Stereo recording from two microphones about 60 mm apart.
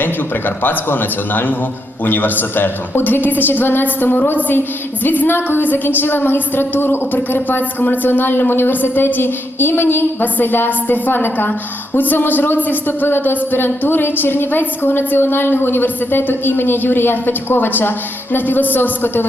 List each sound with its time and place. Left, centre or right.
0.6 s a woman's voice: left